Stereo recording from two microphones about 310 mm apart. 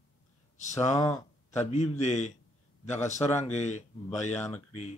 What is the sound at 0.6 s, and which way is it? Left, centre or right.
Speech, left.